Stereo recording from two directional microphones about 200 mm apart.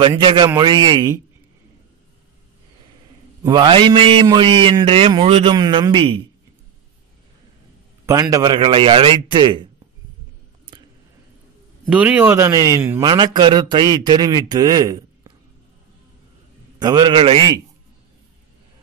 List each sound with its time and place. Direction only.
0.2 s a man's voice: 25° right (ahead or behind)
3.4 s a man's voice: 25° right (ahead or behind)
8.1 s a man's voice: 15° right (ahead or behind)
11.9 s a man's voice: 5° right (ahead or behind)
16.8 s a man's voice: 20° right (ahead or behind)